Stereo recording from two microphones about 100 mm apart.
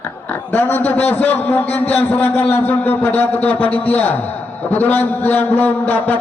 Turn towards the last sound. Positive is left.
turn(degrees=15)  # may be behind; listen again after turning